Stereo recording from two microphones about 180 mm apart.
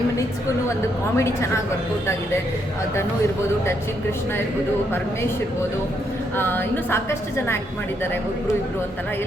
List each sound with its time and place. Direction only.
1.1 s a woman's voice: 15° left (ahead or behind)
6.3 s a woman's voice: 10° left (ahead or behind)